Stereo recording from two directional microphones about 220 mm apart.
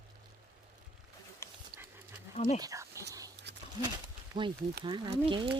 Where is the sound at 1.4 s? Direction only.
10° left (ahead or behind).